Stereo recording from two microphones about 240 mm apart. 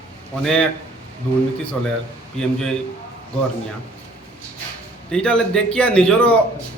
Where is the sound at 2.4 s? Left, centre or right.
Centre.